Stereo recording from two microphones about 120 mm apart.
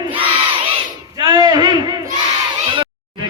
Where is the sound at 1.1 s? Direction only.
30° right (ahead or behind).